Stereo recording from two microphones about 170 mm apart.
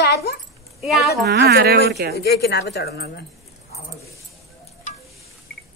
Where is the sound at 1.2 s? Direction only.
70° right (ahead or behind).